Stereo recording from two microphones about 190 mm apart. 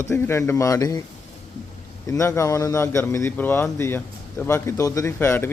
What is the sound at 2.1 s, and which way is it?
A man's voice, 15° left (ahead or behind).